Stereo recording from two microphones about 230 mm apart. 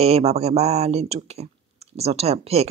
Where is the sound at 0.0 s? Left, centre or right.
Right.